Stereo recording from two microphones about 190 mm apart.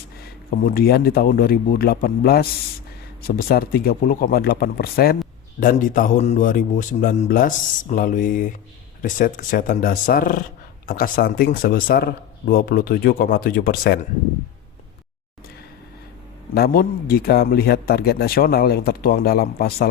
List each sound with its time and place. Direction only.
0.6 s a man's voice: 50° left (ahead or behind)
16.6 s a man's voice: 55° left (ahead or behind)